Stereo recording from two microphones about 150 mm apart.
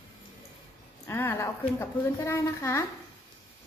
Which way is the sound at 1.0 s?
15° left (ahead or behind).